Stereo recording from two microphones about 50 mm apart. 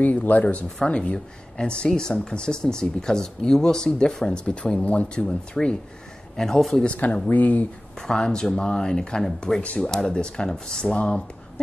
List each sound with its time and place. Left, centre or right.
0.0 s speech: left; by 6.8 s centre
6.8 s speech: left
8.1 s speech: centre